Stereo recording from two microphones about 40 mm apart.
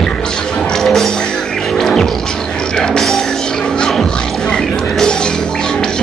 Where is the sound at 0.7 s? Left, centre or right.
Centre.